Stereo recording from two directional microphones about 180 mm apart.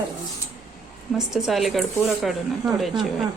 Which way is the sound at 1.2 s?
Centre (ahead or behind).